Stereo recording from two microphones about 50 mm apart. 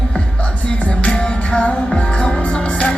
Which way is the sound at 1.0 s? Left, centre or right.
Left.